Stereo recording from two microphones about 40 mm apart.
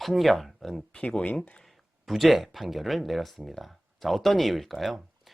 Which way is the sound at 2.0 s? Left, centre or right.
Centre.